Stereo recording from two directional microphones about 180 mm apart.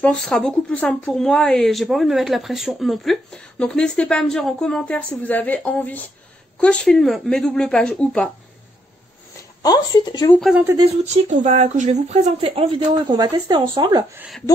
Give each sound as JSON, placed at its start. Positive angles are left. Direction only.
{"t": 0.0, "sound": "speech", "side_deg": 5}
{"t": 9.6, "sound": "speech", "side_deg": 20}
{"t": 10.4, "sound": "speech", "side_deg": -5}
{"t": 11.1, "sound": "speech", "side_deg": -40}